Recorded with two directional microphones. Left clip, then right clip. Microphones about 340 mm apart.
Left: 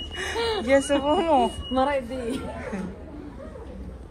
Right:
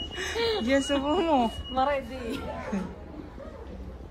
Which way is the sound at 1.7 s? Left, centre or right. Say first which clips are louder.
Left 2 dB; left.